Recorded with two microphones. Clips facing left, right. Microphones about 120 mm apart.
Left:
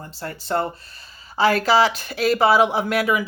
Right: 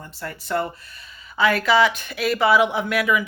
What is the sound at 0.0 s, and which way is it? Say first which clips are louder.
A woman's voice: left 1 dB; 30° left (ahead or behind).